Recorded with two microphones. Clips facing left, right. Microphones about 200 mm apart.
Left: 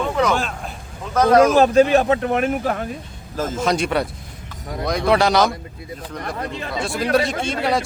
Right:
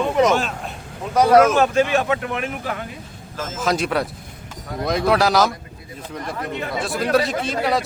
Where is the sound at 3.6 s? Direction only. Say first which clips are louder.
Even; centre (ahead or behind).